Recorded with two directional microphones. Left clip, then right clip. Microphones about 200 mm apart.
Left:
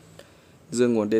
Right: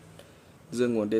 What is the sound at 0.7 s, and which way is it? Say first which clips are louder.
Speech: left 5 dB; 25° left (ahead or behind).